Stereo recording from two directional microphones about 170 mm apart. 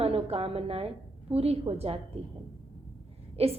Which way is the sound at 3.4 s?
35° right (ahead or behind).